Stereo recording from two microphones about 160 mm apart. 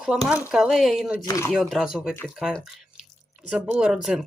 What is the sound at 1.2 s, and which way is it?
Speech, 20° left (ahead or behind).